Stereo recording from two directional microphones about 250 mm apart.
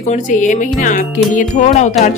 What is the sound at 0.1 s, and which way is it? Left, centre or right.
Speech, left.